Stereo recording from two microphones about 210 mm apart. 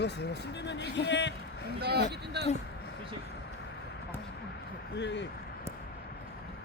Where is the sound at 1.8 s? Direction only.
50° right (ahead or behind).